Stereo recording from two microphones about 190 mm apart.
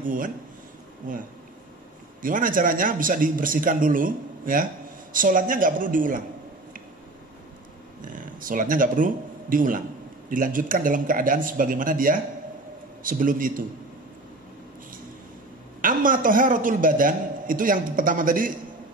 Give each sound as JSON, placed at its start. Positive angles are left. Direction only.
{"t": 0.0, "sound": "a man's voice", "side_deg": -45}
{"t": 2.2, "sound": "a man's voice", "side_deg": -45}
{"t": 8.0, "sound": "a man's voice", "side_deg": -45}
{"t": 15.8, "sound": "a man's voice", "side_deg": -45}